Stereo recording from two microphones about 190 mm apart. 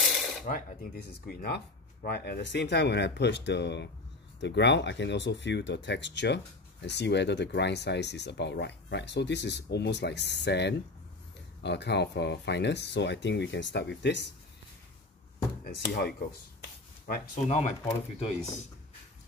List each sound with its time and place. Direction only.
0.5 s speech: 40° left (ahead or behind)
0.9 s speech: 55° left (ahead or behind)
15.6 s speech: 55° left (ahead or behind)
17.5 s speech: 35° left (ahead or behind)